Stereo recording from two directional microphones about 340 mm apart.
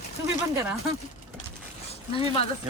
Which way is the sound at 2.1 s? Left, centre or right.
Centre.